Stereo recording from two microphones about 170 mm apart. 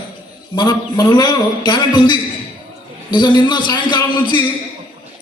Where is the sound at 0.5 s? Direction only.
25° left (ahead or behind).